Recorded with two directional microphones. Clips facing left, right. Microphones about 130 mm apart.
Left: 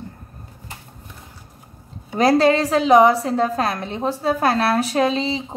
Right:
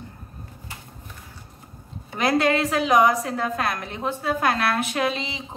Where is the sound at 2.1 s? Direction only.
35° left (ahead or behind).